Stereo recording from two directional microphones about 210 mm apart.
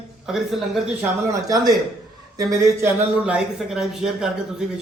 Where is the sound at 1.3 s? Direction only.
15° right (ahead or behind).